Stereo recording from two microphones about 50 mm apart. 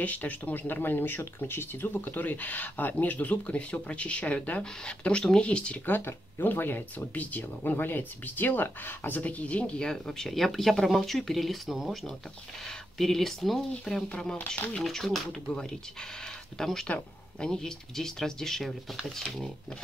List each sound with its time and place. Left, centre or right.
0.0 s speech: left
5.9 s speech: left
9.2 s speech: left
9.8 s speech: centre
14.0 s speech: centre
14.4 s speech: left
14.8 s speech: centre
16.8 s speech: left; by 19.2 s centre